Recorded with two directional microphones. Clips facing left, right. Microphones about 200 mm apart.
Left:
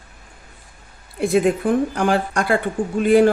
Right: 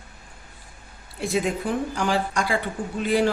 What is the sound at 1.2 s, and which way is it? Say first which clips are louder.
Speech: left 7 dB; 55° left (ahead or behind).